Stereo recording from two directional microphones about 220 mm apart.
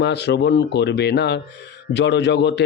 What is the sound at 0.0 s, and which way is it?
Speech, 50° left (ahead or behind).